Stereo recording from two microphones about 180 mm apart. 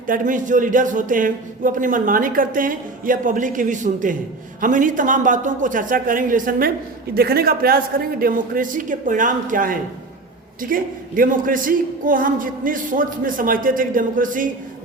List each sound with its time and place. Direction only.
0.1 s a man's voice: 45° right (ahead or behind)